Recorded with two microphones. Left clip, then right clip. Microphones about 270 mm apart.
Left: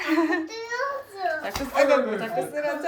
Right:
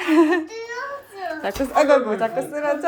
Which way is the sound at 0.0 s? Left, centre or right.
Right.